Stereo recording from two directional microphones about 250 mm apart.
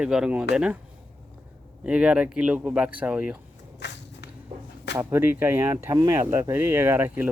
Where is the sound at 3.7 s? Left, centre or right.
Left.